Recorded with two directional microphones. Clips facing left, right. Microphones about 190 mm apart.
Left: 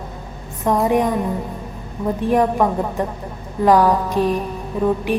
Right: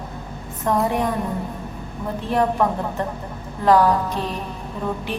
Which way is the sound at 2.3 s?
15° left (ahead or behind).